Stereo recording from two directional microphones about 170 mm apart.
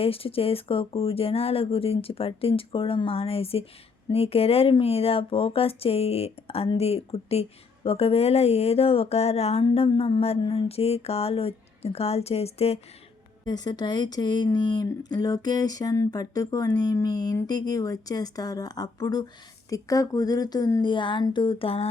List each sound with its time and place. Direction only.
0.0 s speech: 35° left (ahead or behind)
13.4 s speech: 25° left (ahead or behind)